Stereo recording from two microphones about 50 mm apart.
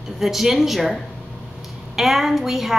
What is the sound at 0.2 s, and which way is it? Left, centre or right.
Speech, centre.